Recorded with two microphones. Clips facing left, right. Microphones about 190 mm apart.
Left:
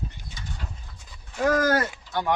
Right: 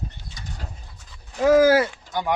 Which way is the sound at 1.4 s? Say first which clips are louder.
Right 7 dB; 5° right (ahead or behind).